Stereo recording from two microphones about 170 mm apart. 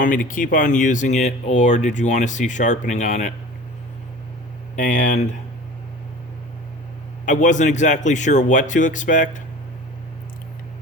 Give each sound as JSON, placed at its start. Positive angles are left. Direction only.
{"t": 0.0, "sound": "speech", "side_deg": 50}
{"t": 4.8, "sound": "speech", "side_deg": 50}
{"t": 7.3, "sound": "speech", "side_deg": 45}